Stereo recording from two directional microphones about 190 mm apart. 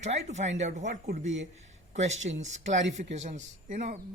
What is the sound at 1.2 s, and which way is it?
Speech, 75° right (ahead or behind).